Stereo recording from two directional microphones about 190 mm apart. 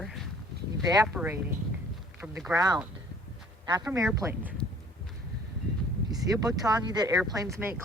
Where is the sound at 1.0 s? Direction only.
10° right (ahead or behind).